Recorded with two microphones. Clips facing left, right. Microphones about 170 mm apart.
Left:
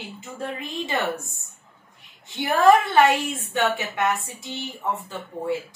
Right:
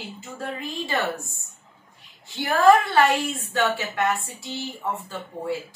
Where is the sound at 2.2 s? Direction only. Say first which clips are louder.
Even; 20° left (ahead or behind).